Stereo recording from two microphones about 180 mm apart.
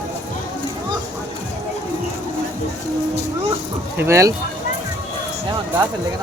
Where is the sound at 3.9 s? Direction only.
15° right (ahead or behind).